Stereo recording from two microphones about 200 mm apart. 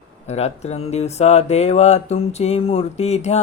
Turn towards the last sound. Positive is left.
turn(degrees=35)  # may be behind; listen again after turning